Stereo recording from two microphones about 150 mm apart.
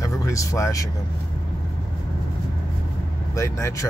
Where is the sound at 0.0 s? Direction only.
20° left (ahead or behind).